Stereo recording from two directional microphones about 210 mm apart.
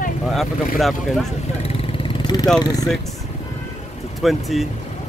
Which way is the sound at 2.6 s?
15° left (ahead or behind).